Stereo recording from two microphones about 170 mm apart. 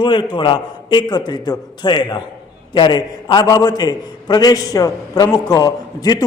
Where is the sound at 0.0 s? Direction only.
30° left (ahead or behind).